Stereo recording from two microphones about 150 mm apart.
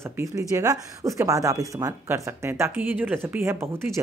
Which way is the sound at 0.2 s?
20° right (ahead or behind).